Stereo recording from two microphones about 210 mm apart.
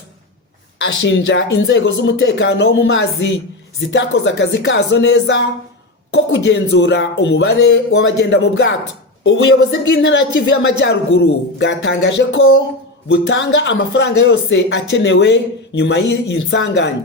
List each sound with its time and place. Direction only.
0.8 s speech: 60° left (ahead or behind)
13.1 s speech: 55° left (ahead or behind)